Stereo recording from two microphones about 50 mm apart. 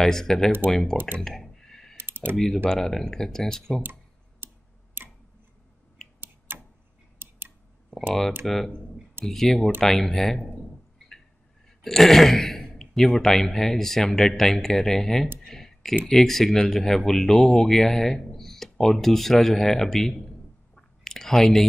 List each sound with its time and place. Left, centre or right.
0.0 s speech: centre
0.9 s speech: right
1.2 s clicking: centre
2.0 s typing: right
2.3 s speech: centre
6.2 s tick-tock: right
7.2 s a sound: right
8.5 s speech: centre
11.8 s speech: centre
15.4 s clicking: centre
16.1 s speech: centre
20.7 s chewing: centre